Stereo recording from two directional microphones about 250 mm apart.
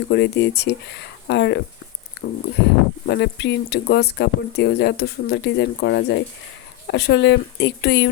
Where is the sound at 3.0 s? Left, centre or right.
Left.